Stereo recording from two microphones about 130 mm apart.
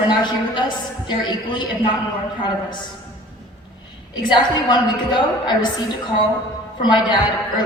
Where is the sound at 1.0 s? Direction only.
35° left (ahead or behind).